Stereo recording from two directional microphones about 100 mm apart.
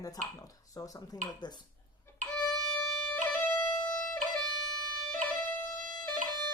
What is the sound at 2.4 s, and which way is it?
Music, 10° left (ahead or behind).